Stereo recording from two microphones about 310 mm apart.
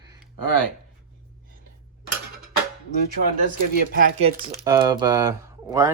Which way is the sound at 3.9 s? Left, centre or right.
Right.